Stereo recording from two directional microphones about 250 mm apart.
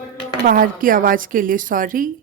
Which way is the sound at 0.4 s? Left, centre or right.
Right.